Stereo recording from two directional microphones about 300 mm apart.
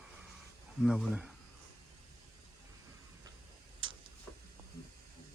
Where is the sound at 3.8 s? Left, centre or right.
Centre.